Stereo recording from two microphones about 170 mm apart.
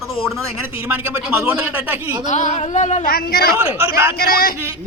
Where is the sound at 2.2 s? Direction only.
45° left (ahead or behind).